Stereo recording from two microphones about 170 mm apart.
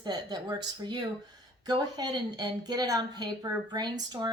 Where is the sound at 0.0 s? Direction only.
25° right (ahead or behind).